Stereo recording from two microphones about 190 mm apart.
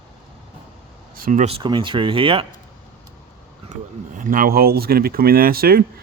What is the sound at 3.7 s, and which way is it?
Speech, 45° right (ahead or behind).